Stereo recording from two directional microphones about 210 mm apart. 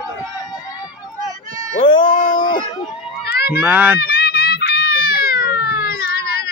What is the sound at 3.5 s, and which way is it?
Speech, 10° right (ahead or behind).